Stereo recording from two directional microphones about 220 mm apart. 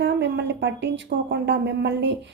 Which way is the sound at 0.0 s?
50° right (ahead or behind).